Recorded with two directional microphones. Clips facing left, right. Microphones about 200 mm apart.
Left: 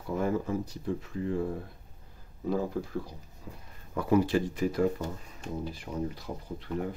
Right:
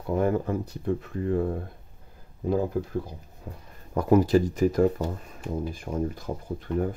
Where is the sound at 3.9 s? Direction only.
45° right (ahead or behind).